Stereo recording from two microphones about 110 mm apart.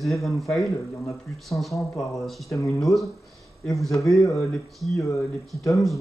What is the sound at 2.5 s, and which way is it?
Speech, 30° left (ahead or behind).